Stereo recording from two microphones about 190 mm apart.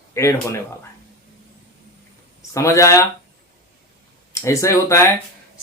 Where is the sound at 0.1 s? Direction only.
15° left (ahead or behind).